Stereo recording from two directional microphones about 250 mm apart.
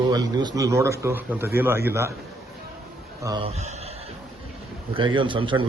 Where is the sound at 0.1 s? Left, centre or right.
Centre.